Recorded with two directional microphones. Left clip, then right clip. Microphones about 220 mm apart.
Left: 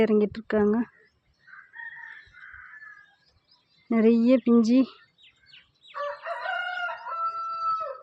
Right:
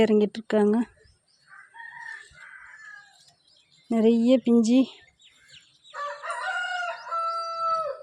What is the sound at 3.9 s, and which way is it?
Speech, 5° right (ahead or behind).